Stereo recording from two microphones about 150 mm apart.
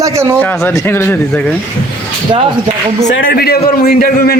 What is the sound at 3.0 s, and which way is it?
A man's voice, 80° left.